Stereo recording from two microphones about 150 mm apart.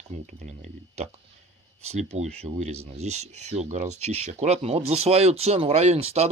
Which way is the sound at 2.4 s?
45° right (ahead or behind).